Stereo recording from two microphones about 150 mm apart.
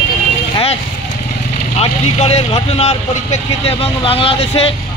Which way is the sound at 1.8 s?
45° left (ahead or behind).